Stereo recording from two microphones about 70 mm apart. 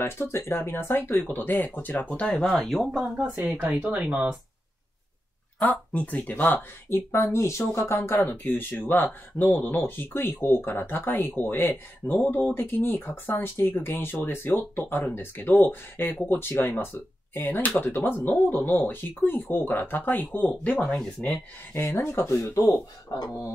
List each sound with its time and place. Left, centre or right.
0.0 s speech: left; by 2.5 s centre
2.5 s speech: centre
3.8 s speech: right
5.7 s speech: left
6.9 s speech: left; by 21.4 s centre
21.7 s speech: left
22.2 s speech: left
23.1 s speech: left